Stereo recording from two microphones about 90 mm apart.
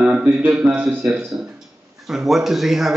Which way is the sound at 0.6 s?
20° right (ahead or behind).